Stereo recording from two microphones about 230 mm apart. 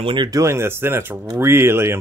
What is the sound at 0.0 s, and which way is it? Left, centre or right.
Speech, centre.